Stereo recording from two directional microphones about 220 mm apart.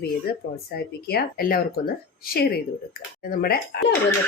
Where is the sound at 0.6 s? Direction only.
45° left (ahead or behind).